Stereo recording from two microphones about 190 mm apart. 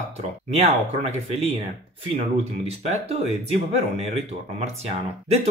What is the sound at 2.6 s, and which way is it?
Speech, 35° right (ahead or behind).